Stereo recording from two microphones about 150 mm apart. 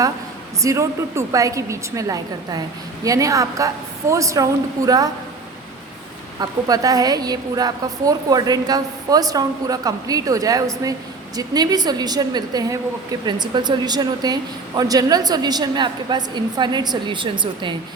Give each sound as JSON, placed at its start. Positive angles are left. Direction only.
{"t": 0.6, "sound": "a woman's voice", "side_deg": -20}
{"t": 6.4, "sound": "a woman's voice", "side_deg": -25}